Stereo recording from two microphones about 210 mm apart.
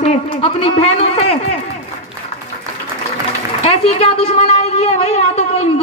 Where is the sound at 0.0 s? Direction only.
25° left (ahead or behind).